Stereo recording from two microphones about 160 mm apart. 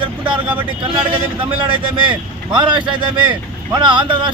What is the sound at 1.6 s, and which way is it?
Speech, 30° right (ahead or behind).